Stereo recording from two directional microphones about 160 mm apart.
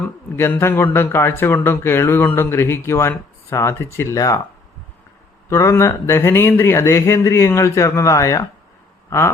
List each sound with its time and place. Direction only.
0.3 s speech: 15° left (ahead or behind)
5.5 s speech: 20° left (ahead or behind)
9.0 s a sound: 15° left (ahead or behind)